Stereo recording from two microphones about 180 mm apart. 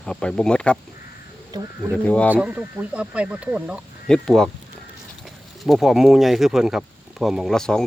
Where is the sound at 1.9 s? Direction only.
5° left (ahead or behind).